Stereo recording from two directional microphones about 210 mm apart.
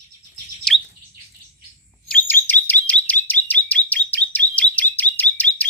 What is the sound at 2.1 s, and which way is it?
Chirp, 10° left (ahead or behind).